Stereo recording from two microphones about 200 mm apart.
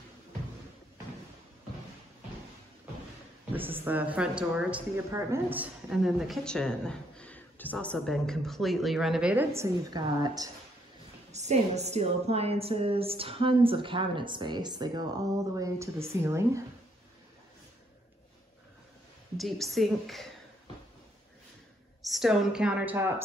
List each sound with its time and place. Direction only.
3.5 s a woman's voice: 10° right (ahead or behind)
11.3 s speech: 35° right (ahead or behind); by 16.6 s 15° right (ahead or behind)
19.3 s a woman's voice: centre (ahead or behind)
22.0 s a woman's voice: centre (ahead or behind)